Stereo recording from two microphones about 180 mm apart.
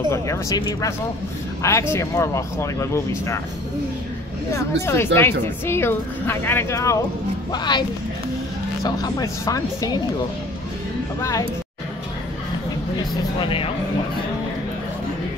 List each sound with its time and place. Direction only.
0.1 s speech: 15° left (ahead or behind)
4.8 s speech: 15° left (ahead or behind)
8.8 s speech: 20° left (ahead or behind)
11.1 s speech: 20° left (ahead or behind)
13.4 s speech: 30° left (ahead or behind)